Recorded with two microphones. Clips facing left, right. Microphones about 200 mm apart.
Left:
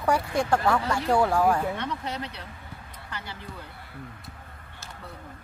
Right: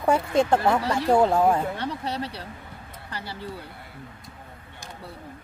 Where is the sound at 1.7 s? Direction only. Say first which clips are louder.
Right 2 dB; 35° right (ahead or behind).